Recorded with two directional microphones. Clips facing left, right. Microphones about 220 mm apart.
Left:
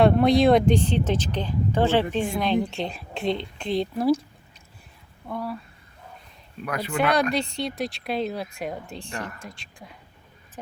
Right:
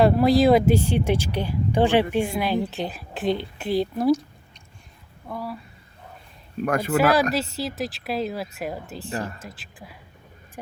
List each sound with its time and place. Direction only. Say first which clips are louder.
0.0 s a woman's voice: even; 5° right (ahead or behind)
5.3 s a woman's voice: left 1 dB; centre (ahead or behind)
6.7 s speech: right 6 dB; 50° right (ahead or behind)
6.9 s a woman's voice: right 2 dB; 5° right (ahead or behind)
9.1 s speech: right 5 dB; 30° right (ahead or behind)
9.4 s a woman's voice: right 1 dB; 5° right (ahead or behind)